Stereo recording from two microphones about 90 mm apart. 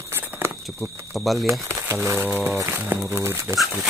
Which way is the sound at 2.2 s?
20° right (ahead or behind).